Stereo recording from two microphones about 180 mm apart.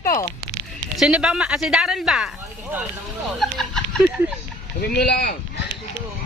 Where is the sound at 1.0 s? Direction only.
5° right (ahead or behind).